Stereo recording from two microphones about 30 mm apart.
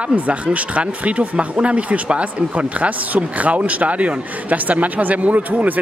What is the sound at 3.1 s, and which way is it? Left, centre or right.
A man's voice, right.